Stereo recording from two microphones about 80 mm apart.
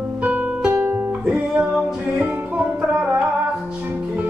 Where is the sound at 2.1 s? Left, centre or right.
Right.